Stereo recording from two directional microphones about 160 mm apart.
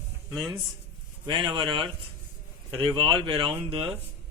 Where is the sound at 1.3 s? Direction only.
30° right (ahead or behind).